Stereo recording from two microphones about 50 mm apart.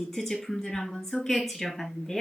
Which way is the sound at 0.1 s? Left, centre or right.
Centre.